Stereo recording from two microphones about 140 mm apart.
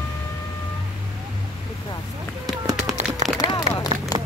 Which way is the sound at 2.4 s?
25° right (ahead or behind).